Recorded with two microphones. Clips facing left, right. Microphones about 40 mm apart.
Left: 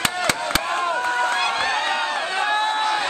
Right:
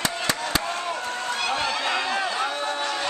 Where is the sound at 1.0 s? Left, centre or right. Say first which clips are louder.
Left 7 dB; left.